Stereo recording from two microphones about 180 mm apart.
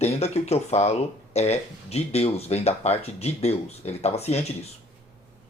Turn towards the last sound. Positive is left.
turn(degrees=35)  # may be behind; listen again after turning